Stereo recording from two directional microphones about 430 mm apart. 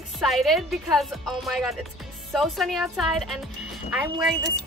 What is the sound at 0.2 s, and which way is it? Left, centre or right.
Speech, centre.